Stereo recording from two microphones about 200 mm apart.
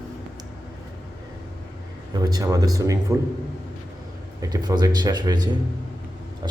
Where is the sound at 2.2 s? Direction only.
20° right (ahead or behind).